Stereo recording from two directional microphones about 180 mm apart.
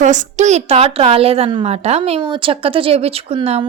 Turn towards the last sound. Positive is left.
turn(degrees=-30)  # may be behind; listen again after turning